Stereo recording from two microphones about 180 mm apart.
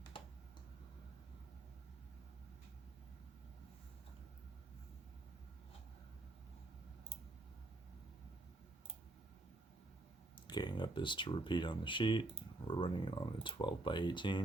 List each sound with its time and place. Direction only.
10.3 s speech: 25° left (ahead or behind)